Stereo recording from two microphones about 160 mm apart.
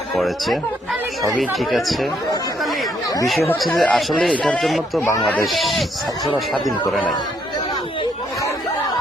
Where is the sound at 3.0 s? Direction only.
25° left (ahead or behind).